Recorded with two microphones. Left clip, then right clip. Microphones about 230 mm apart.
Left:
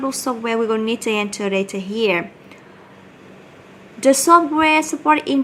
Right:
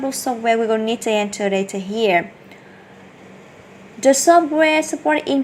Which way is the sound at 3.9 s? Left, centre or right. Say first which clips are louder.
Even; centre.